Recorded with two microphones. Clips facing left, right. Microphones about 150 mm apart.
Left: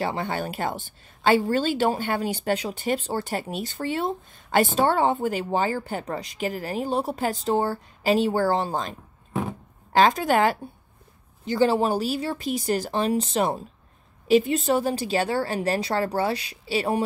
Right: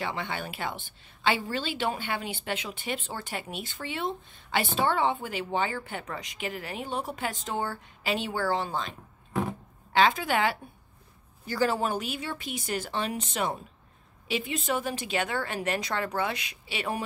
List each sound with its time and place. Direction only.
0.0 s speech: 40° left (ahead or behind)
9.3 s a sound: 5° left (ahead or behind)
9.9 s speech: 40° left (ahead or behind)
11.4 s speech: 25° left (ahead or behind)